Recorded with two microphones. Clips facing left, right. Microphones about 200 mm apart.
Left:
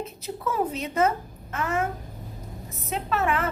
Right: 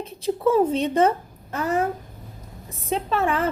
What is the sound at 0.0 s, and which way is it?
A woman's voice, 30° right (ahead or behind).